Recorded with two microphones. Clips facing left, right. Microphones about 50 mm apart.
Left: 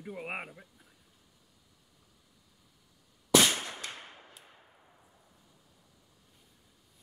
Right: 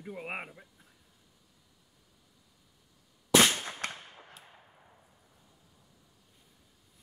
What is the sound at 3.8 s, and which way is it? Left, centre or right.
Fireworks, right.